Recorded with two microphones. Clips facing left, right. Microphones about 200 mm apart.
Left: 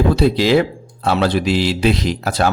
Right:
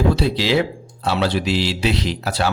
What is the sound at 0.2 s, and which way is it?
A man's voice, 50° left (ahead or behind).